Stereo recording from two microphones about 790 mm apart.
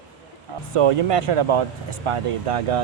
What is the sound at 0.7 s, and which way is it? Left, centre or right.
Speech, right.